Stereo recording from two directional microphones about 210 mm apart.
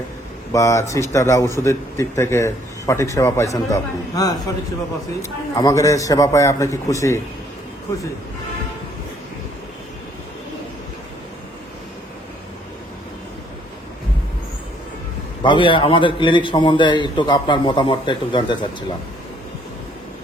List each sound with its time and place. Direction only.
0.5 s a man's voice: 15° left (ahead or behind)
5.5 s a man's voice: 15° left (ahead or behind)
15.4 s a man's voice: 25° left (ahead or behind)